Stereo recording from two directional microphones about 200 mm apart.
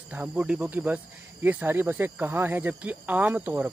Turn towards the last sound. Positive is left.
turn(degrees=-10)  # may be behind; listen again after turning